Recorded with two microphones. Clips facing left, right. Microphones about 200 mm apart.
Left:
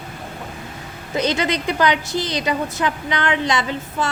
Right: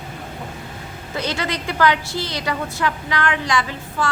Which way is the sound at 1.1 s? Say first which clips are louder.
Left 5 dB; 20° left (ahead or behind).